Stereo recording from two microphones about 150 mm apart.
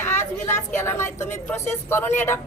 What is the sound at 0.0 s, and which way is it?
Vehicle, 15° left (ahead or behind).